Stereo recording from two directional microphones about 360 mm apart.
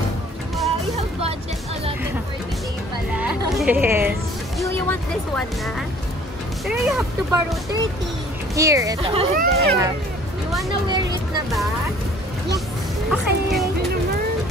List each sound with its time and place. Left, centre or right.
3.2 s music: centre
4.6 s music: centre
6.6 s speech: centre
8.5 s speech: centre; by 9.8 s right
13.1 s music: centre